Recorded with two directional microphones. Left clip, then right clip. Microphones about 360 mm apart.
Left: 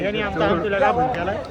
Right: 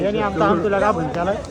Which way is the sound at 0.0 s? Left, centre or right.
Centre.